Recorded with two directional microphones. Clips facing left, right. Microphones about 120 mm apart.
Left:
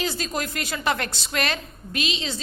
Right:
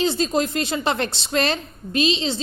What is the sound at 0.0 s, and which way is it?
A woman's voice, 25° right (ahead or behind).